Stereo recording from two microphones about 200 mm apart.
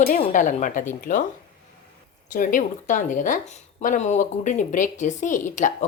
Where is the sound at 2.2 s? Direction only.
40° left (ahead or behind).